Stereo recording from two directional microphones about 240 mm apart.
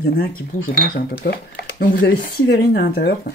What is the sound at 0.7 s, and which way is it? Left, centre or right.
Speech, left.